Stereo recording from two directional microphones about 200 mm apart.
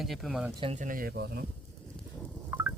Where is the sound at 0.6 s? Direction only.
35° right (ahead or behind); by 1.5 s 50° right (ahead or behind).